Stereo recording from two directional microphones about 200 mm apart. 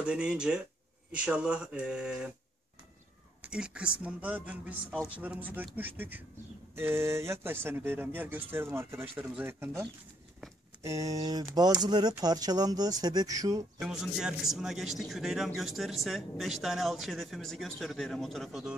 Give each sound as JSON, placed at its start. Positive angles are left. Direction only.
{"t": 0.0, "sound": "a man's voice", "side_deg": -5}
{"t": 3.4, "sound": "speech", "side_deg": -5}
{"t": 13.7, "sound": "a man's voice", "side_deg": 0}